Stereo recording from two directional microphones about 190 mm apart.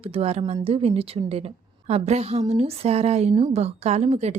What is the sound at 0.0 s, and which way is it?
A woman's voice, 30° right (ahead or behind).